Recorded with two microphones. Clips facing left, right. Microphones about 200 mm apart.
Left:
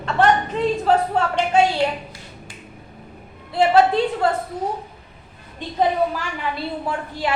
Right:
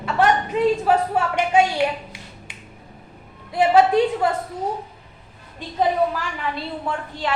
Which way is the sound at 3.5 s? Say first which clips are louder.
Even; 15° right (ahead or behind).